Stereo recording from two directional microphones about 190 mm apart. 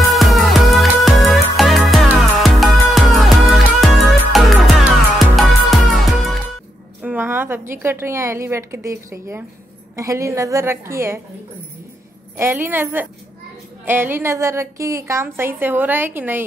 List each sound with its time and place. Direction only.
0.1 s music: centre (ahead or behind)
7.0 s a woman's voice: 10° right (ahead or behind)
12.4 s a woman's voice: 10° right (ahead or behind)